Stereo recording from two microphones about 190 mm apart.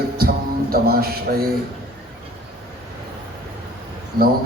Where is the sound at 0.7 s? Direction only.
50° right (ahead or behind).